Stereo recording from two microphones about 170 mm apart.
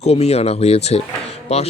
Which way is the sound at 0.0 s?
40° left (ahead or behind).